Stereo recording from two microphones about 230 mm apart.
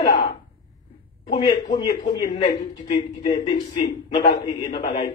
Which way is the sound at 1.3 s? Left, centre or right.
Centre.